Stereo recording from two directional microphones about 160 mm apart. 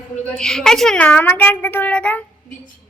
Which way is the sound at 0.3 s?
5° left (ahead or behind).